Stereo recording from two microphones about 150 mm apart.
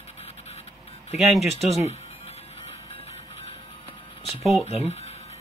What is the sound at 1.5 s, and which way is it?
Speech, 45° right (ahead or behind).